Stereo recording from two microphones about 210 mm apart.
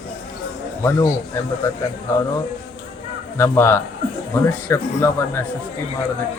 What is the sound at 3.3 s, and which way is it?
A man's voice, 10° left (ahead or behind).